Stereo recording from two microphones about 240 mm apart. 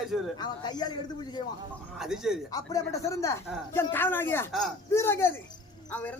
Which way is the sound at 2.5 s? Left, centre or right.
Centre.